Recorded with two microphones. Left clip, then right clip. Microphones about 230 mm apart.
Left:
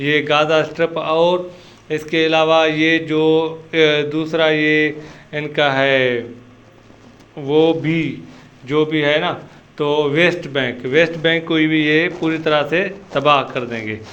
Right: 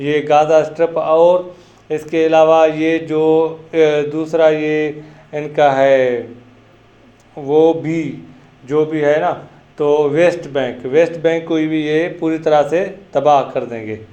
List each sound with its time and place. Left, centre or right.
0.0 s mantra: left
7.4 s mantra: left
8.7 s speech: left
9.7 s mantra: left